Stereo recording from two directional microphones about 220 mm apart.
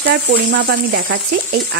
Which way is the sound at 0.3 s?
50° right (ahead or behind).